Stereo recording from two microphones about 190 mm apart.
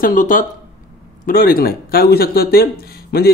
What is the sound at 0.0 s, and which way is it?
A man's voice, 45° left (ahead or behind).